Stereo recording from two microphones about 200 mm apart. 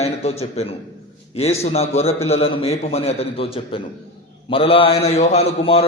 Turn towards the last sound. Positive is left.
turn(degrees=30)  # may be behind; listen again after turning